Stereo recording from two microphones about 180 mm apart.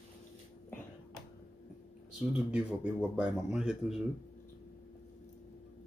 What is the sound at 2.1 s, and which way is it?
Speech, 5° right (ahead or behind).